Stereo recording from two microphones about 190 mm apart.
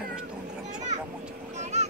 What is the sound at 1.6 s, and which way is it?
Speech, 35° right (ahead or behind).